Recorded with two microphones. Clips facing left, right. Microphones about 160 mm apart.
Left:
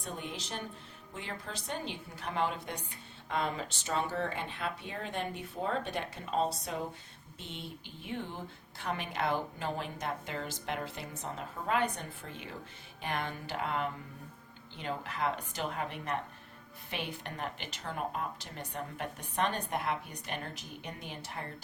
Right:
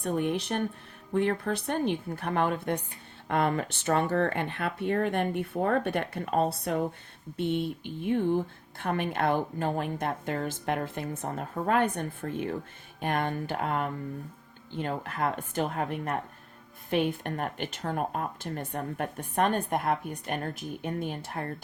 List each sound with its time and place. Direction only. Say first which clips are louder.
0.0 s a woman's voice: right 12 dB; 60° right (ahead or behind)